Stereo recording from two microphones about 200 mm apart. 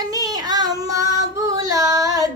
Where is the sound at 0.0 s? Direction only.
20° right (ahead or behind).